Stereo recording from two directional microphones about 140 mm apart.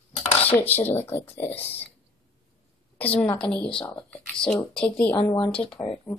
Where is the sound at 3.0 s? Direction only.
10° left (ahead or behind).